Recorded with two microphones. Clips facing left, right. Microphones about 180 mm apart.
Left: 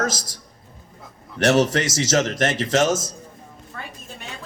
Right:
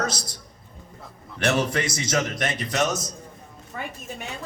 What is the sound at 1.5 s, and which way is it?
A man's voice, 85° left.